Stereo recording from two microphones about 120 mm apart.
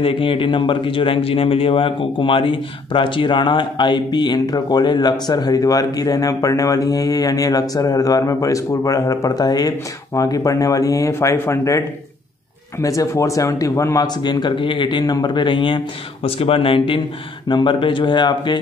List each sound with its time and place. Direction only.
0.0 s a man's voice: 45° left (ahead or behind); by 11.8 s 25° left (ahead or behind)
12.8 s a man's voice: 25° left (ahead or behind)